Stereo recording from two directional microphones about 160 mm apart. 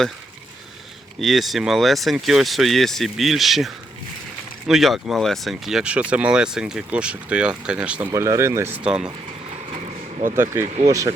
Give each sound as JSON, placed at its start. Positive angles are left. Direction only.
{"t": 1.2, "sound": "speech", "side_deg": 0}
{"t": 8.1, "sound": "speech", "side_deg": -20}
{"t": 10.3, "sound": "speech", "side_deg": -15}